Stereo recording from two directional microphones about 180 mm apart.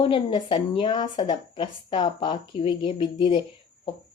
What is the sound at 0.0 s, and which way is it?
Speech, 25° left (ahead or behind).